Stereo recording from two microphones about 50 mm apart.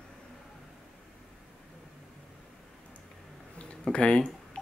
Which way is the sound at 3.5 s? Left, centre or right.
Left.